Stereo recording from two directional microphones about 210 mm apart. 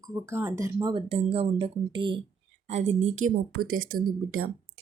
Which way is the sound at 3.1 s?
75° right (ahead or behind).